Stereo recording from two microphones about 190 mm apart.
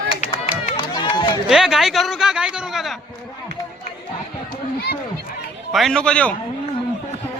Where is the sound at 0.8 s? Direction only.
20° left (ahead or behind).